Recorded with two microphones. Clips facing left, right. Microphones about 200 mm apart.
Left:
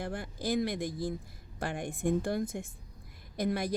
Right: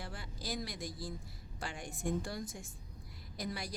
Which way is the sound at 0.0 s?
50° left (ahead or behind).